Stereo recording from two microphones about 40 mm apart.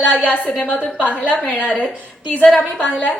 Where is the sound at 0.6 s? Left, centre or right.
Left.